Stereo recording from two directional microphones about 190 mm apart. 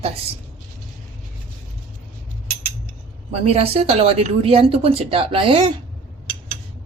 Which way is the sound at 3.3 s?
30° right (ahead or behind).